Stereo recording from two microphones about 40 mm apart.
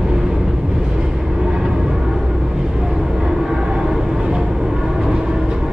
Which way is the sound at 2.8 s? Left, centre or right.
Centre.